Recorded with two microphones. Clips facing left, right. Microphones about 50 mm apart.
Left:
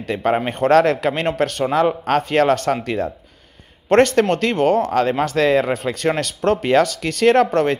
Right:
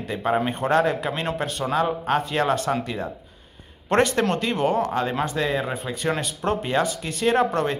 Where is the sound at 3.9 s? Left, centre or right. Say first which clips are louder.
Left 6 dB; left.